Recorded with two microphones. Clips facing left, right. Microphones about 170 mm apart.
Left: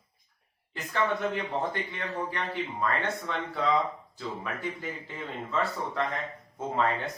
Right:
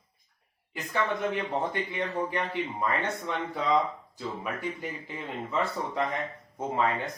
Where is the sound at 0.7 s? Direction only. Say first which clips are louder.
Left 1 dB; 10° right (ahead or behind).